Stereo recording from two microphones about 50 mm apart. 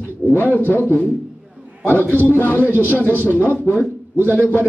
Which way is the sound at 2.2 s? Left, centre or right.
Left.